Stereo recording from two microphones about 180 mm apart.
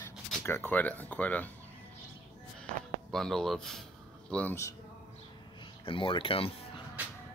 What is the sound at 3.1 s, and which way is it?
Speech, centre (ahead or behind).